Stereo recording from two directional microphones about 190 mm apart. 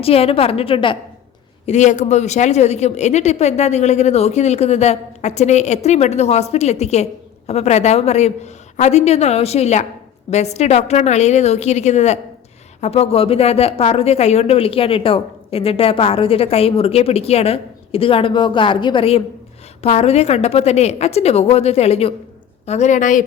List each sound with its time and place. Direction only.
0.0 s speech: 30° left (ahead or behind)
1.6 s speech: 40° left (ahead or behind)